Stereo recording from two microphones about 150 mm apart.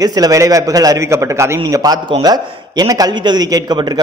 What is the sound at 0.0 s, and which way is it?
A man's voice, 25° right (ahead or behind).